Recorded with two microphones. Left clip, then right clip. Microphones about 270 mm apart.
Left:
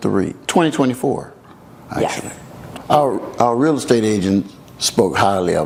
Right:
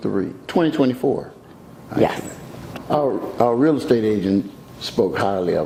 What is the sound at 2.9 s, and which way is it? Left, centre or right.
Speech, left.